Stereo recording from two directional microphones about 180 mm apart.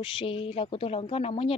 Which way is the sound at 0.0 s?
30° left (ahead or behind).